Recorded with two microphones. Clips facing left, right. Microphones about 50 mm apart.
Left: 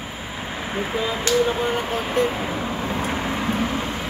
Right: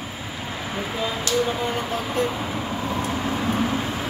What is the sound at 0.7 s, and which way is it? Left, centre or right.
Speech, centre.